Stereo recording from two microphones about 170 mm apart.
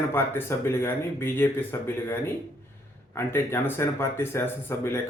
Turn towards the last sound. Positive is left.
turn(degrees=15)  # may be behind; listen again after turning